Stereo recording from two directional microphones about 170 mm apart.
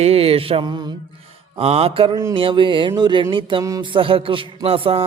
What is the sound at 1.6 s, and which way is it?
Mantra, 35° right (ahead or behind).